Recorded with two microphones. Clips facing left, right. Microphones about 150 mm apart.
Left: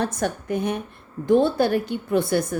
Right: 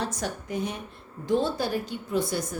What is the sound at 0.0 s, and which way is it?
A woman's voice, 55° left (ahead or behind).